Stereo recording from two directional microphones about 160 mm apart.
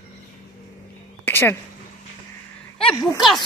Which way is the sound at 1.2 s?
15° left (ahead or behind).